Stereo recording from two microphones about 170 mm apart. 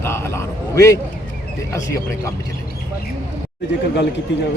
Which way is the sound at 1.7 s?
20° left (ahead or behind).